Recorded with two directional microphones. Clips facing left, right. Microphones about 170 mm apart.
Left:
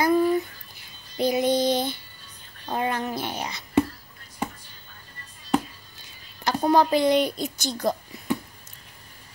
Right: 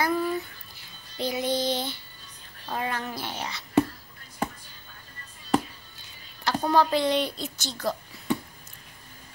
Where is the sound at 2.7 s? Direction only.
20° left (ahead or behind).